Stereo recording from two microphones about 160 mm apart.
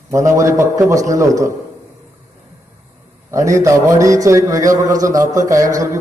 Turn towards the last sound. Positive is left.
turn(degrees=-20)  # may be behind; listen again after turning